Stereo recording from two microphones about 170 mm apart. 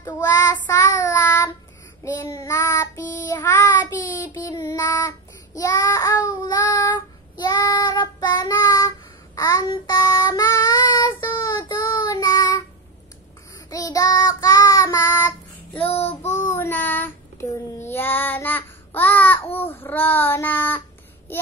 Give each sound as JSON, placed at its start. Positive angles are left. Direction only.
{"t": 0.0, "sound": "child singing", "side_deg": 20}
{"t": 13.7, "sound": "child singing", "side_deg": 20}
{"t": 15.8, "sound": "child singing", "side_deg": 35}
{"t": 16.4, "sound": "child singing", "side_deg": 15}